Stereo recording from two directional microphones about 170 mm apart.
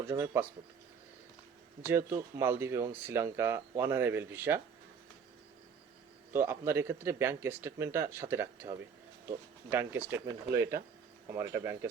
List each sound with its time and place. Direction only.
0.0 s speech: 15° right (ahead or behind)
1.9 s speech: 15° right (ahead or behind)
6.3 s speech: 15° right (ahead or behind)